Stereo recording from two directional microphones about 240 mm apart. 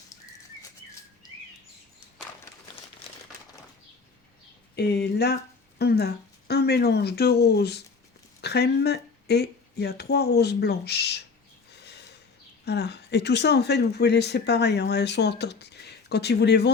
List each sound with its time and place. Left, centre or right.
4.7 s speech: left
11.7 s a sound: left
12.6 s speech: left